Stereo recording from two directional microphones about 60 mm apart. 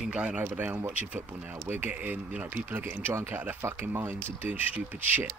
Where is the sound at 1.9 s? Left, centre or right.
Right.